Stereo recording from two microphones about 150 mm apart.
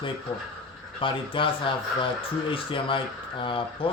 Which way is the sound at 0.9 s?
35° left (ahead or behind).